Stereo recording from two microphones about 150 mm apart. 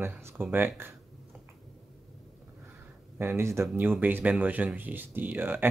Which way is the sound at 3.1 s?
15° right (ahead or behind).